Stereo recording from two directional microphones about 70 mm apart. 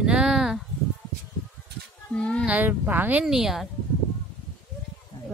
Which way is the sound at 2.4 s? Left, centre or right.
Right.